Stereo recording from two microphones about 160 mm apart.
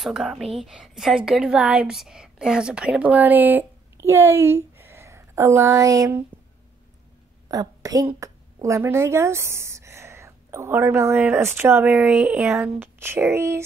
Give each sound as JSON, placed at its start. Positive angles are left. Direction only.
{"t": 0.0, "sound": "a woman's voice", "side_deg": 0}
{"t": 7.4, "sound": "a woman's voice", "side_deg": -20}